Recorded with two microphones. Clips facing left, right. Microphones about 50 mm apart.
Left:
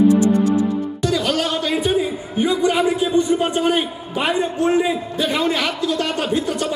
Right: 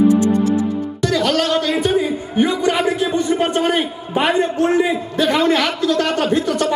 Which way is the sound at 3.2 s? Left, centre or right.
Right.